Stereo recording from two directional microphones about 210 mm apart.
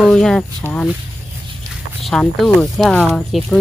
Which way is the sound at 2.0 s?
Centre (ahead or behind).